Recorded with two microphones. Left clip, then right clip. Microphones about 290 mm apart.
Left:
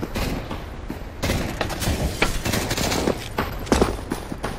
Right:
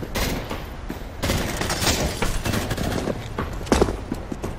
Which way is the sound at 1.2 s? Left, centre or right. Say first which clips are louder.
Even; centre.